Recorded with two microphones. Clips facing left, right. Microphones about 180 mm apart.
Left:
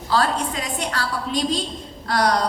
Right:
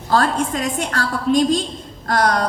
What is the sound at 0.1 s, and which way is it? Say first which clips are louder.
A woman's voice: right 3 dB; 45° right (ahead or behind).